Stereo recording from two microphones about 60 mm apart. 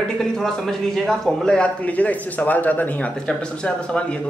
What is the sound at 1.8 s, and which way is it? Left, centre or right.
A man's voice, left.